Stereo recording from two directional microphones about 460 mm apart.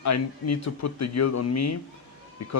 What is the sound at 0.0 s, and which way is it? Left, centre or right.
Speech, left.